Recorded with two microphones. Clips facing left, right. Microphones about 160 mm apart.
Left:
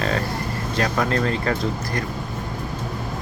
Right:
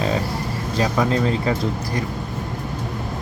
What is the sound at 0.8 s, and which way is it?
Speech, 5° right (ahead or behind).